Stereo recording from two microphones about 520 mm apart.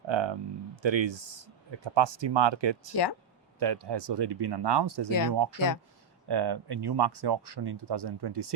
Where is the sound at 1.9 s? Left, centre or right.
Right.